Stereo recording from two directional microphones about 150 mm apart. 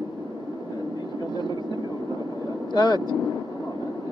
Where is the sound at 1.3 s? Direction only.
30° left (ahead or behind).